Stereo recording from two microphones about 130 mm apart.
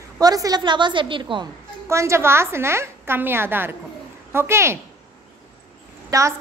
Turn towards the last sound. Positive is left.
turn(degrees=-25)  # may be behind; listen again after turning